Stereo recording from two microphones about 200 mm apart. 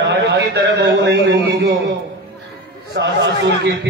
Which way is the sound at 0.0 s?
60° right (ahead or behind).